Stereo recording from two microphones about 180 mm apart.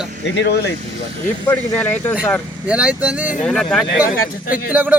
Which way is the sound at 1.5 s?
10° left (ahead or behind).